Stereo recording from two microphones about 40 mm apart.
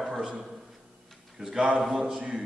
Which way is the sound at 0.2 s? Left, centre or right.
Centre.